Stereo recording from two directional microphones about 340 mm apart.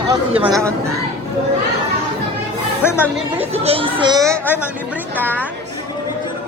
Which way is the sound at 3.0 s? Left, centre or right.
Centre.